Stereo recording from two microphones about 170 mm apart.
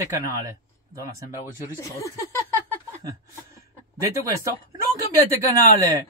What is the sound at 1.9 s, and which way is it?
Speech, 20° left (ahead or behind).